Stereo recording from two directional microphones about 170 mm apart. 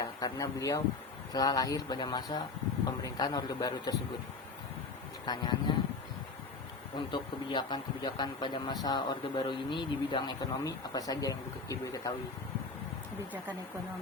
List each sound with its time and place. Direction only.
0.0 s speech: 20° left (ahead or behind)
5.2 s speech: 25° left (ahead or behind)
7.1 s speech: 25° left (ahead or behind)